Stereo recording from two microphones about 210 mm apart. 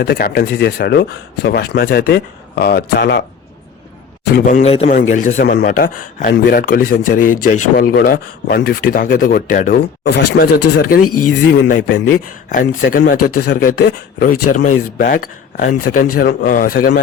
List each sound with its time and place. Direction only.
0.0 s speech: 45° left (ahead or behind)
4.4 s speech: 40° left (ahead or behind)
4.7 s a man's voice: 30° left (ahead or behind)
5.4 s speech: 50° left (ahead or behind)
5.6 s speech: 40° left (ahead or behind)
10.0 s speech: 55° left (ahead or behind)
11.0 s speech: 90° left
11.7 s speech: 40° left (ahead or behind)